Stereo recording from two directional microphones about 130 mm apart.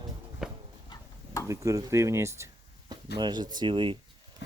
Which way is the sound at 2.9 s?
35° right (ahead or behind).